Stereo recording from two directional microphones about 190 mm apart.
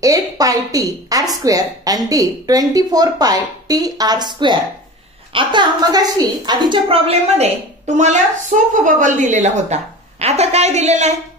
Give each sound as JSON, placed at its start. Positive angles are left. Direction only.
{"t": 0.0, "sound": "a woman's voice", "side_deg": -20}